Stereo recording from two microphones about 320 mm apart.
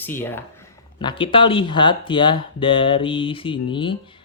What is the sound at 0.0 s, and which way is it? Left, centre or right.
Speech, centre.